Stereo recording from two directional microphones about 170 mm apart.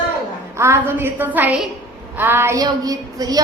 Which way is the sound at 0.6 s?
15° right (ahead or behind).